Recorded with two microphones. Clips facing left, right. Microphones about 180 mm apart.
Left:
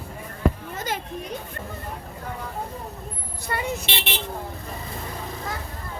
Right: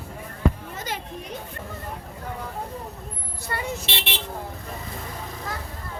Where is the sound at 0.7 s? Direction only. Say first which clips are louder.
Left 3 dB; 50° left (ahead or behind).